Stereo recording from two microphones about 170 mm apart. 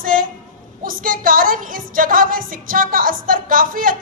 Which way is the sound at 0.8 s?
55° right (ahead or behind).